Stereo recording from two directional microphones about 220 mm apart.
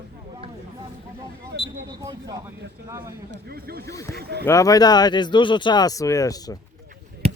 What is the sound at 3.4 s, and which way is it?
Speech, 45° right (ahead or behind).